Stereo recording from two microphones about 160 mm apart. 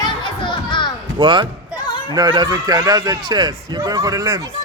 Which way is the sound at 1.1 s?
30° right (ahead or behind).